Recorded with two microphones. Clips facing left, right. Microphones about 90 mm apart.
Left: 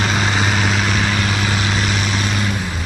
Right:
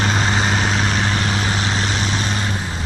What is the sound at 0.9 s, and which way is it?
Vehicle, 30° right (ahead or behind).